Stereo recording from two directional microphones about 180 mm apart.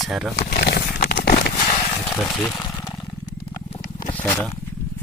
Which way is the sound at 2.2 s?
5° left (ahead or behind).